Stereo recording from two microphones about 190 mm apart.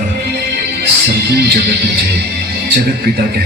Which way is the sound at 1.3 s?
60° right (ahead or behind).